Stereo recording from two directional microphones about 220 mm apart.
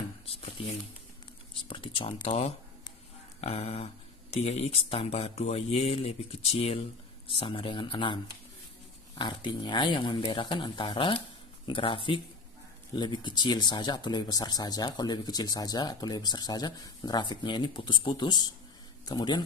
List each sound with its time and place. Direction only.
0.6 s speech: 25° left (ahead or behind)
9.2 s speech: 20° left (ahead or behind)